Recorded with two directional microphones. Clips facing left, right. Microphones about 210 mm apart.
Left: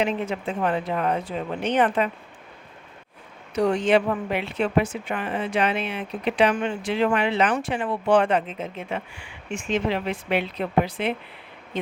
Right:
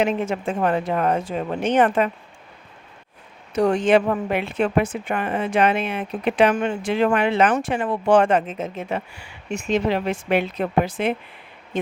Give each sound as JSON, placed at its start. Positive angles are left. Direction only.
{"t": 0.0, "sound": "a woman's voice", "side_deg": -45}
{"t": 3.5, "sound": "a woman's voice", "side_deg": -50}